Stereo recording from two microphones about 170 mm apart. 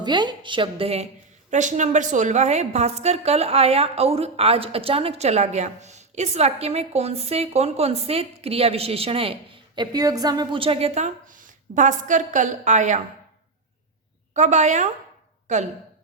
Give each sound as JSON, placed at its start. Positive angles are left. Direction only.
{"t": 0.0, "sound": "a woman's voice", "side_deg": -25}
{"t": 14.3, "sound": "a woman's voice", "side_deg": -45}